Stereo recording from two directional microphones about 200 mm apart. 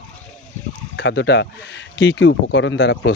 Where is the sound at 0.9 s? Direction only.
60° left (ahead or behind).